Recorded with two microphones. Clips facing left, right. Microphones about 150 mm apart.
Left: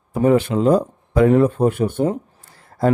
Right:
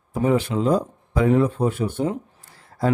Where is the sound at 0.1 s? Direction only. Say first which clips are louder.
Left 5 dB; 55° left (ahead or behind).